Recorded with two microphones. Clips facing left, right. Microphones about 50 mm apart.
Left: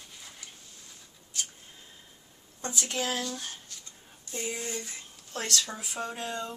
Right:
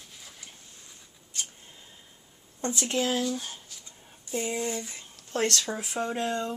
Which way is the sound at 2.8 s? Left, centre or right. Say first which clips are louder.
Right 4 dB; right.